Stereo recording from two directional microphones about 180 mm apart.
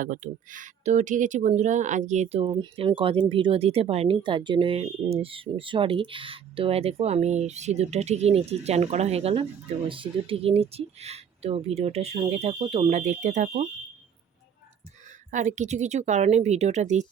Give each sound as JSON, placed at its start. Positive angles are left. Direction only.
{"t": 0.0, "sound": "speech", "side_deg": -45}
{"t": 15.3, "sound": "speech", "side_deg": -45}